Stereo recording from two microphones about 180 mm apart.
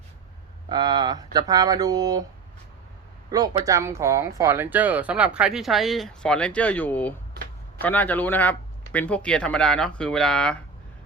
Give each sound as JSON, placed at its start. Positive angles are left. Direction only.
{"t": 0.7, "sound": "speech", "side_deg": -25}
{"t": 3.3, "sound": "speech", "side_deg": -20}